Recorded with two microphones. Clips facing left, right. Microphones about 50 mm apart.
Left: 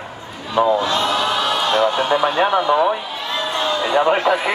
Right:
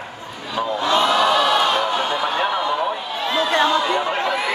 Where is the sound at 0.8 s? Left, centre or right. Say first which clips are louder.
Right 2 dB; right.